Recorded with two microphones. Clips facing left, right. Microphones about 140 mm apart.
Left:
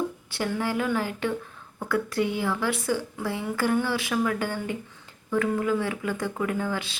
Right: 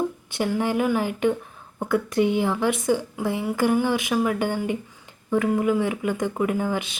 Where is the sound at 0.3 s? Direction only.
20° right (ahead or behind).